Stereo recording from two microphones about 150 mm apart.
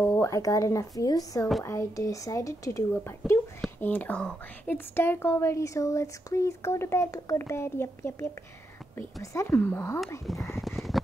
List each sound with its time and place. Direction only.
0.0 s a woman's voice: 15° left (ahead or behind)
10.2 s speech: centre (ahead or behind)